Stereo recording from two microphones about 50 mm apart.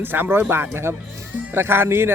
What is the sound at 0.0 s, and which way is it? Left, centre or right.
Speech, right.